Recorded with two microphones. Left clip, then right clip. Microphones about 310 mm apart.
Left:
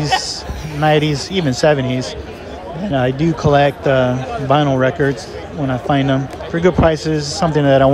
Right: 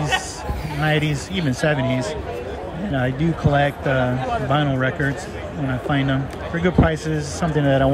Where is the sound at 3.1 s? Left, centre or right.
Centre.